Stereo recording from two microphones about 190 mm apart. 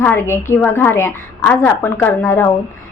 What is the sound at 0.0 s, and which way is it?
A woman's voice, 10° left (ahead or behind).